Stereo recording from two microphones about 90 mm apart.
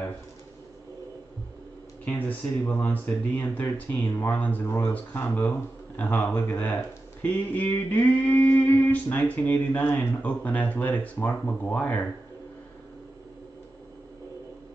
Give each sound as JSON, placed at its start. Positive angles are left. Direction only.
{"t": 2.1, "sound": "speech", "side_deg": 20}